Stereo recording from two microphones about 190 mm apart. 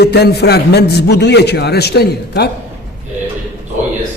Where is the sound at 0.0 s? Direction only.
60° left (ahead or behind).